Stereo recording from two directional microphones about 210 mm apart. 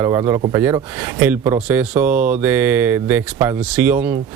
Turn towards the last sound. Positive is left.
turn(degrees=-5)  # may be behind; listen again after turning